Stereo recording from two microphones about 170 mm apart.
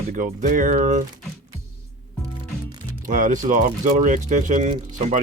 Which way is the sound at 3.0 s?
50° right (ahead or behind).